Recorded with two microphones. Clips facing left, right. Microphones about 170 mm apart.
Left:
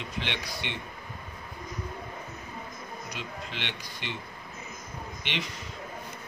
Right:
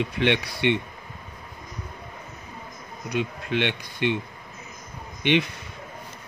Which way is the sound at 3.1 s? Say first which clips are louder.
Right 16 dB; 60° right (ahead or behind).